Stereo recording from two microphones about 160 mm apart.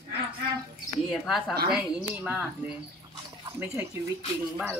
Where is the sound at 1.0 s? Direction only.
Centre (ahead or behind).